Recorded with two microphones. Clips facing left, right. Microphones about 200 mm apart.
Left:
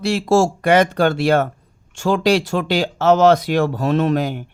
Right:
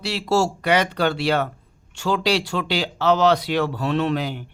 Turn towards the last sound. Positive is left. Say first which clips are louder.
# left 4 dB
turn(degrees=45)  # may be behind; listen again after turning